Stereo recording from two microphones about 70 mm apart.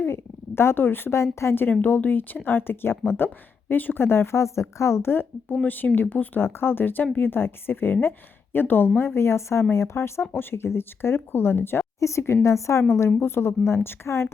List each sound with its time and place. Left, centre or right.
0.0 s a woman's voice: left
11.9 s a woman's voice: left